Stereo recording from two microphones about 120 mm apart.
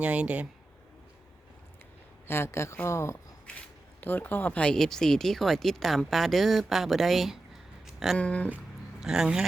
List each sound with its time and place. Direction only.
0.0 s speech: 10° right (ahead or behind)
2.2 s speech: 20° left (ahead or behind); by 7.3 s centre (ahead or behind)
7.9 s a sound: centre (ahead or behind)
8.2 s speech: 10° left (ahead or behind)
8.4 s speech: 5° right (ahead or behind)